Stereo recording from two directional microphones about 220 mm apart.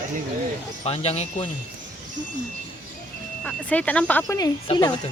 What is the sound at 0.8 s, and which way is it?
Speech, 25° left (ahead or behind).